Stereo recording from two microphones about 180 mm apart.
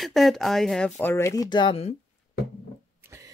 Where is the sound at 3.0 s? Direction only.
15° right (ahead or behind).